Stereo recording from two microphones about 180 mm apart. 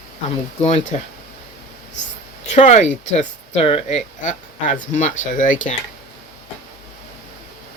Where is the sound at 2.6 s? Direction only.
40° left (ahead or behind).